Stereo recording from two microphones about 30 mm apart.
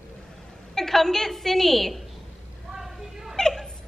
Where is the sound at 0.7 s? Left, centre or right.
Centre.